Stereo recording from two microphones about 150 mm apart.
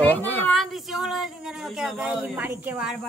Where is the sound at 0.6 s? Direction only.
Centre (ahead or behind).